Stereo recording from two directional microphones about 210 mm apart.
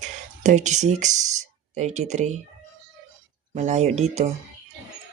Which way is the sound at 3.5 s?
35° right (ahead or behind).